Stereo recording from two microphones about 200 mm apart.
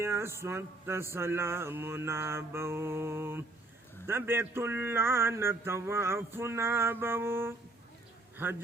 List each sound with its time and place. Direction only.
0.0 s speech: 10° right (ahead or behind)